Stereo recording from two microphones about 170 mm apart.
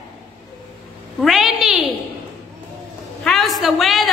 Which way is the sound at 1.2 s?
Centre (ahead or behind).